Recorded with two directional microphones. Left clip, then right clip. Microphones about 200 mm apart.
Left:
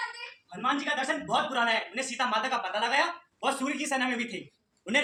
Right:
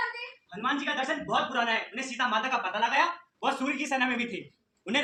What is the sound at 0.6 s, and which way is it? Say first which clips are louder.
A man's voice: left 1 dB; 20° left (ahead or behind).